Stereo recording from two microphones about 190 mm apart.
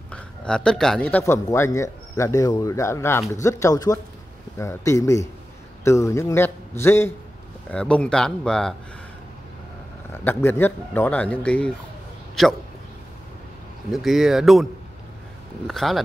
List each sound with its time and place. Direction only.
0.1 s a man's voice: 5° left (ahead or behind)
10.1 s a man's voice: 10° left (ahead or behind)
13.9 s speech: centre (ahead or behind)